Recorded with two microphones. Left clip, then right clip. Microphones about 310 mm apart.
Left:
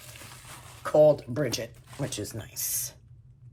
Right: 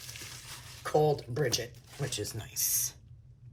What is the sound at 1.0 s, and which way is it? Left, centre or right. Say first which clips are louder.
Speech: left 7 dB; centre.